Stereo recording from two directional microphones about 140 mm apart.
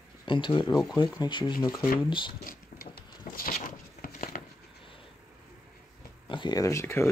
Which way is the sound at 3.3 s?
90° left.